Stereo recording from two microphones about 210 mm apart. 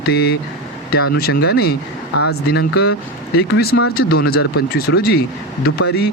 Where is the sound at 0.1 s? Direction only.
50° left (ahead or behind).